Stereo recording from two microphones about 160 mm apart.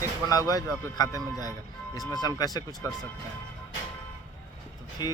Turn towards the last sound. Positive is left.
turn(degrees=25)  # may be behind; listen again after turning